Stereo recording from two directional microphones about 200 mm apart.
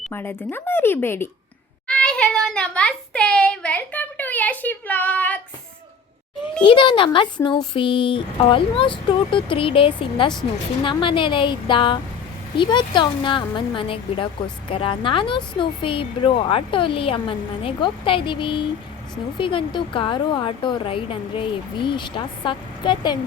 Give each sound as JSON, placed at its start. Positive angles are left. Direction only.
{"t": 0.1, "sound": "speech", "side_deg": 10}
{"t": 1.9, "sound": "child singing", "side_deg": 5}
{"t": 6.6, "sound": "a woman's voice", "side_deg": 25}